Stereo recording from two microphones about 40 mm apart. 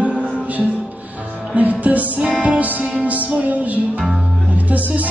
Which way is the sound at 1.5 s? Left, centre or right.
Right.